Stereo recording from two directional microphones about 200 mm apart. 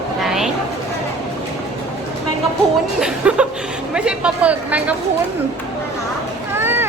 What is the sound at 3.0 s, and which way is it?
Chuckle, 5° right (ahead or behind).